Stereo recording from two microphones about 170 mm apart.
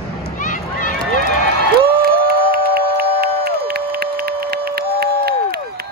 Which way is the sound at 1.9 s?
65° right (ahead or behind).